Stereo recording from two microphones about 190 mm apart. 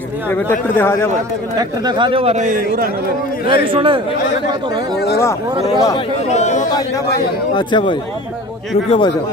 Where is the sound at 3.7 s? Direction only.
25° right (ahead or behind).